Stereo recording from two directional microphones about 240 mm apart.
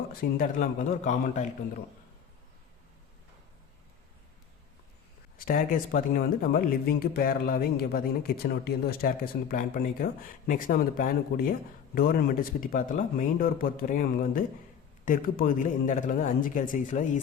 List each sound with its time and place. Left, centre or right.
0.1 s speech: left
5.4 s speech: left